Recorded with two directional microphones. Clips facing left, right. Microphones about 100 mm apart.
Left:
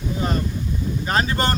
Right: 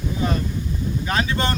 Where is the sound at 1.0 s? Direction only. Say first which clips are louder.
Left 2 dB; 40° left (ahead or behind).